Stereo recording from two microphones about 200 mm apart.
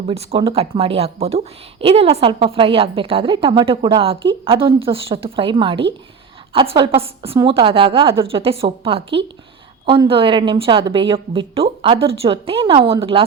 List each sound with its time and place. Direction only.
0.1 s speech: 30° right (ahead or behind)